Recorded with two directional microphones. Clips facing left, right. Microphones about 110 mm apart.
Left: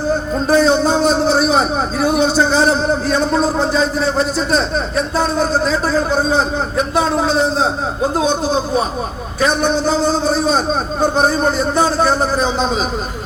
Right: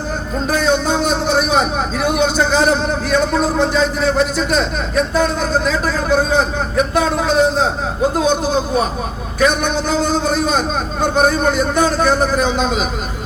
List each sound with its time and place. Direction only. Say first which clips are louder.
0.4 s a man's voice: left 4 dB; 40° left (ahead or behind)
9.6 s a man's voice: left 2 dB; 40° left (ahead or behind)